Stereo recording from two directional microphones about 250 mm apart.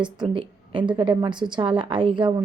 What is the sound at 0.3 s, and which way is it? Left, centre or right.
A woman's voice, centre.